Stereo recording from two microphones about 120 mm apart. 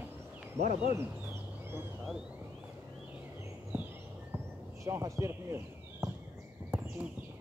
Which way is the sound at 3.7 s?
15° right (ahead or behind).